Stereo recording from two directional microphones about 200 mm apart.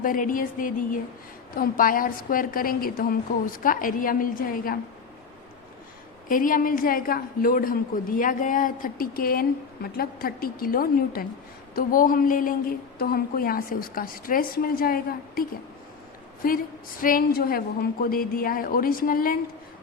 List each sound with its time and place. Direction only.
0.0 s a woman's voice: 45° left (ahead or behind)
6.2 s a woman's voice: 45° left (ahead or behind)